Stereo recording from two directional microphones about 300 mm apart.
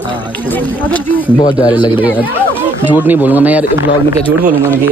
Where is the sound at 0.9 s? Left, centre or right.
Centre.